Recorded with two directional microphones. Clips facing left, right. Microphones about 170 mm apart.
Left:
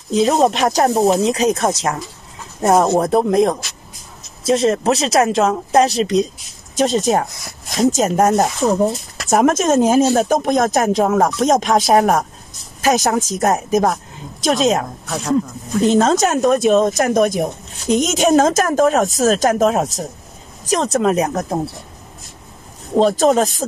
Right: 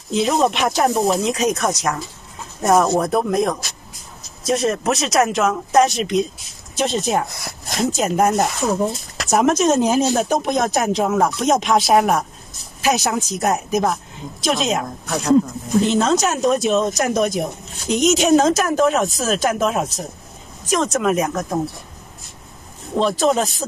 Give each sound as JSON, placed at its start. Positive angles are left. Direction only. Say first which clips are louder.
{"t": 0.1, "sound": "speech", "louder": "left 3 dB", "side_deg": 40}
{"t": 15.9, "sound": "speech", "louder": "left 3 dB", "side_deg": 45}
{"t": 22.9, "sound": "speech", "louder": "left 4 dB", "side_deg": 45}